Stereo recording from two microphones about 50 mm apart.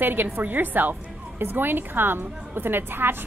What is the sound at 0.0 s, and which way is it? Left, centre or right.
A woman's voice, right.